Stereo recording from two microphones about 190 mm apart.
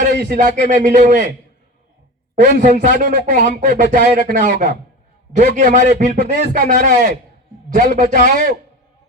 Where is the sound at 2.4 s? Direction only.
45° right (ahead or behind).